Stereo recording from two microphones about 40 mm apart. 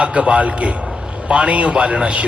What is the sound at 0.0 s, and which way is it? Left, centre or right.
A man's voice, right.